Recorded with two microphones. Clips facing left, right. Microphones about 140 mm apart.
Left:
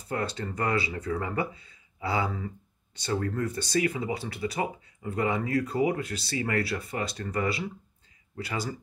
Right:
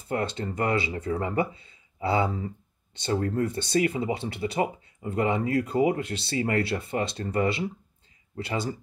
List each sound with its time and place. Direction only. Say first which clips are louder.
0.1 s speech: right 3 dB; 25° right (ahead or behind)